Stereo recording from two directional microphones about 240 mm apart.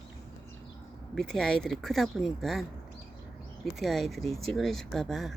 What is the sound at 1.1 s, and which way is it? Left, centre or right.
Speech, centre.